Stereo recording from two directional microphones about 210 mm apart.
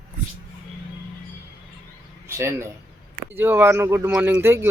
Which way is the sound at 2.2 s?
10° right (ahead or behind).